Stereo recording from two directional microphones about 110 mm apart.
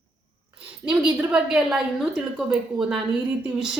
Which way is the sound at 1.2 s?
5° right (ahead or behind).